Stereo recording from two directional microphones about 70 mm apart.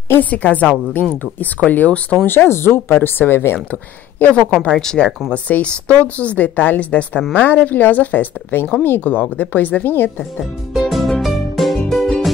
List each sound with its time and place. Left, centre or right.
0.2 s a woman's voice: left
2.2 s speech: left
4.3 s a woman's voice: centre
10.7 s music: centre